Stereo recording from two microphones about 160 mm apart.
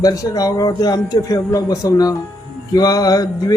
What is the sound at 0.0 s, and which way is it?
Speech, 20° left (ahead or behind).